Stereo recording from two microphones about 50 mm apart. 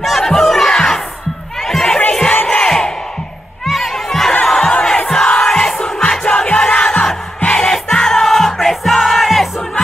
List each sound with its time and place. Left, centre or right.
0.0 s crowd: centre
3.6 s crowd: centre
7.4 s music: centre